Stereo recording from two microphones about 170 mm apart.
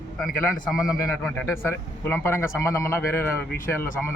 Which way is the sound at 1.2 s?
10° left (ahead or behind).